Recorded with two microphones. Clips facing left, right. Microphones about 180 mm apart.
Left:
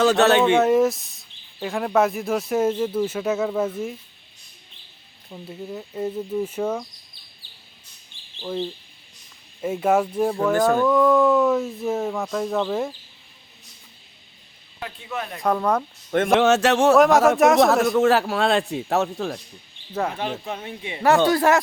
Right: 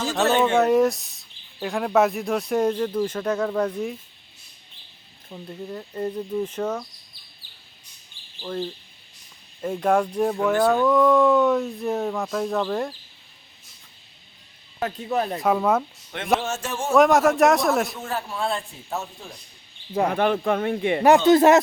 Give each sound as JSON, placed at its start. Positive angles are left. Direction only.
{"t": 0.0, "sound": "speech", "side_deg": 70}
{"t": 0.4, "sound": "speech", "side_deg": 0}
{"t": 5.3, "sound": "speech", "side_deg": 5}
{"t": 8.4, "sound": "speech", "side_deg": 15}
{"t": 9.6, "sound": "speech", "side_deg": 5}
{"t": 14.8, "sound": "speech", "side_deg": -40}
{"t": 15.4, "sound": "speech", "side_deg": -5}
{"t": 16.4, "sound": "a man's voice", "side_deg": 80}
{"t": 17.0, "sound": "speech", "side_deg": 0}
{"t": 17.9, "sound": "a man's voice", "side_deg": 90}
{"t": 20.1, "sound": "speech", "side_deg": -55}
{"t": 21.2, "sound": "speech", "side_deg": -20}